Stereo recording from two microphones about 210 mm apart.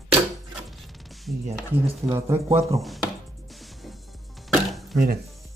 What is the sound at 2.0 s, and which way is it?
Speech, 15° right (ahead or behind).